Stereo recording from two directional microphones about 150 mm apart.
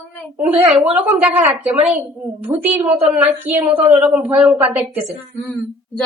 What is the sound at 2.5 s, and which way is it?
Speech, 15° right (ahead or behind).